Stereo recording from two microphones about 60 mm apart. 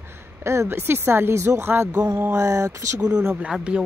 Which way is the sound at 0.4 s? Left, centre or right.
Right.